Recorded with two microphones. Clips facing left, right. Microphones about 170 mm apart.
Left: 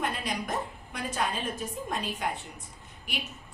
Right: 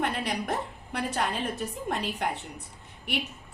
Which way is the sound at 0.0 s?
65° right (ahead or behind).